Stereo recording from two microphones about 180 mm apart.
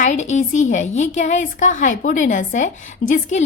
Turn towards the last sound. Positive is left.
turn(degrees=45)  # may be behind; listen again after turning